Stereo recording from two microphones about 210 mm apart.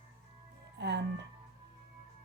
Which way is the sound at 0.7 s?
55° right (ahead or behind).